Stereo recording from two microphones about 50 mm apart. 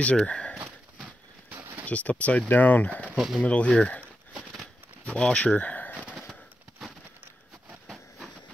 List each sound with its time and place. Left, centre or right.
0.0 s speech: left
1.9 s speech: left
3.1 s speech: centre
3.4 s speech: left
5.0 s speech: centre
7.8 s train: centre